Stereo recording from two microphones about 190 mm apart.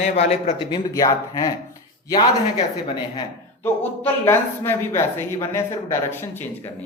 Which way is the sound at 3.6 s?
10° left (ahead or behind).